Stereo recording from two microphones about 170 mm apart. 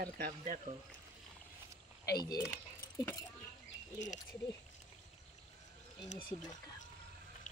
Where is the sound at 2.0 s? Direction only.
25° left (ahead or behind).